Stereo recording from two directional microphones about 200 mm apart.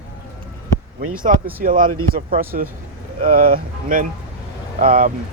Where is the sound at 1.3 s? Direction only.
35° right (ahead or behind).